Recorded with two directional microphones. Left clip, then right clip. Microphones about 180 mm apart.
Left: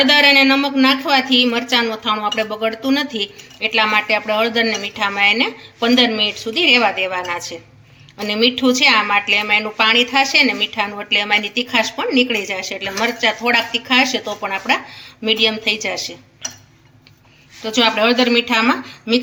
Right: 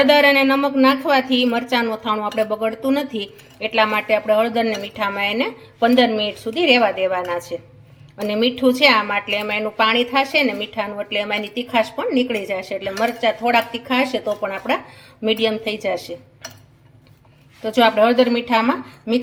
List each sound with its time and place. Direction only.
0.0 s a woman's voice: 35° right (ahead or behind)
17.6 s a woman's voice: 30° right (ahead or behind)